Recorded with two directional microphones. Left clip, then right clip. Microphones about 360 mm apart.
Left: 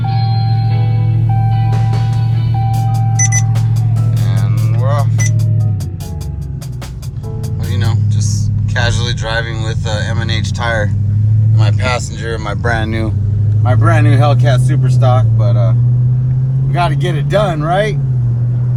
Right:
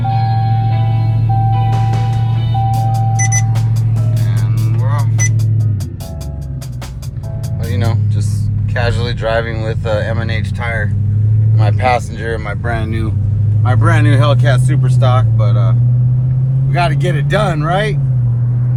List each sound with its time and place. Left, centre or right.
1.7 s music: centre
2.9 s a sound: centre
4.9 s music: centre
8.7 s vehicle: centre
11.6 s speech: centre
13.7 s speech: centre
16.7 s speech: centre